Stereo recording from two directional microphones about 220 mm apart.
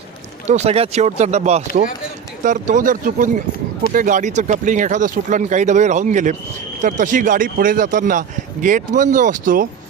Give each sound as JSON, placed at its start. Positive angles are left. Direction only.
{"t": 0.4, "sound": "speech", "side_deg": -30}